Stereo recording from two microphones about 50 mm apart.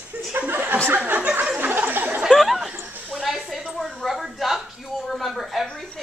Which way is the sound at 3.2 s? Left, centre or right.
Centre.